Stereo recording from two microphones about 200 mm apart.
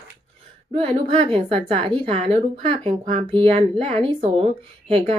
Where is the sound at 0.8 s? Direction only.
30° right (ahead or behind).